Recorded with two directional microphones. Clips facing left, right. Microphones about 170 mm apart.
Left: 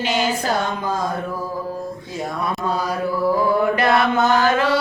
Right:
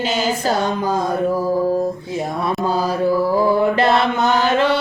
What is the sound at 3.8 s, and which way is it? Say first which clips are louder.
Chant: right 1 dB; 25° right (ahead or behind).